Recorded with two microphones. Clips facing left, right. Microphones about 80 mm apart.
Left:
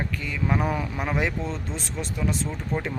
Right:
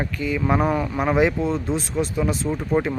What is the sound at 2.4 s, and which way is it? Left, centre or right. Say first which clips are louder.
Speech: right 8 dB; centre.